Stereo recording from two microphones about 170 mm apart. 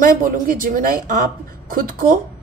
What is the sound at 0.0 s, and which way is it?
A woman's voice, 55° right (ahead or behind).